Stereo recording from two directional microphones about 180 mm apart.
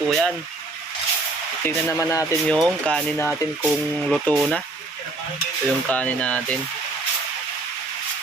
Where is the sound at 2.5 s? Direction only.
5° left (ahead or behind).